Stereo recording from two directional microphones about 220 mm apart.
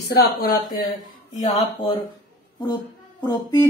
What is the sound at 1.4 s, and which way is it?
Speech, 25° left (ahead or behind).